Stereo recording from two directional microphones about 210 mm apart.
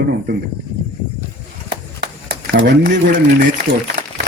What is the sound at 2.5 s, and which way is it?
Speech, 55° right (ahead or behind).